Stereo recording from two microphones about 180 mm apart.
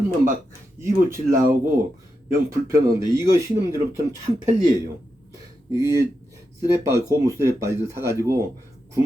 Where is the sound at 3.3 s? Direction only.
15° right (ahead or behind).